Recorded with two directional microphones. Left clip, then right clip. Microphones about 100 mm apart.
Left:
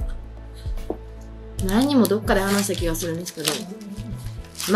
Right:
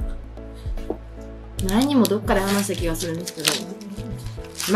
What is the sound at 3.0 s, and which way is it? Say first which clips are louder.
Music: right 2 dB; 20° right (ahead or behind).